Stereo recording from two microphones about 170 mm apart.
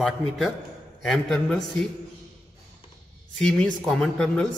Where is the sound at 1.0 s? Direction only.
Centre (ahead or behind).